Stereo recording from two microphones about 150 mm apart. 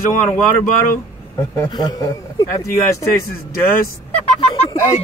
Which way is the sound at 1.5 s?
25° left (ahead or behind).